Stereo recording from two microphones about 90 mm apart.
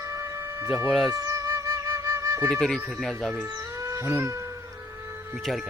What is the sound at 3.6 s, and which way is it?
Music, 30° right (ahead or behind).